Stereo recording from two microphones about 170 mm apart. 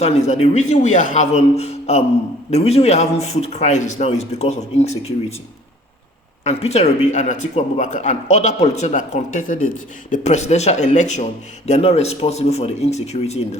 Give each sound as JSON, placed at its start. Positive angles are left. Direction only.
{"t": 0.3, "sound": "speech", "side_deg": 40}
{"t": 6.4, "sound": "a man's voice", "side_deg": 40}